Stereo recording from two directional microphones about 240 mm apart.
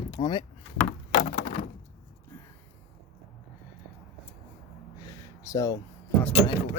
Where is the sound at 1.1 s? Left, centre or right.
Left.